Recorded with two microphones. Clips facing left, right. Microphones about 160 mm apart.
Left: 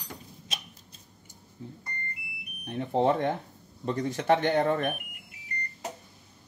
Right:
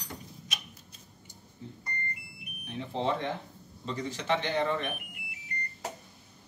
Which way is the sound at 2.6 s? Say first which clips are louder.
Left 7 dB; 55° left (ahead or behind).